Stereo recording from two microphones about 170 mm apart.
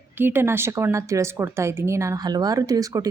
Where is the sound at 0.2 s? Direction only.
10° right (ahead or behind).